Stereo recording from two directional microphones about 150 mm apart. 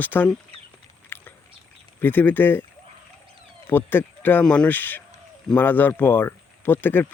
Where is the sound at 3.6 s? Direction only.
15° left (ahead or behind).